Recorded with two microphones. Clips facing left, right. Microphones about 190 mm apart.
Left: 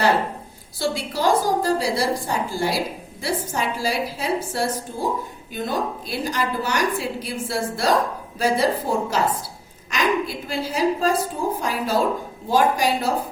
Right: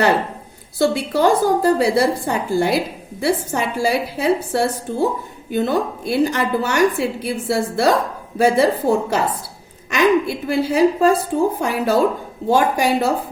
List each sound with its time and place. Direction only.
0.8 s a woman's voice: 60° right (ahead or behind)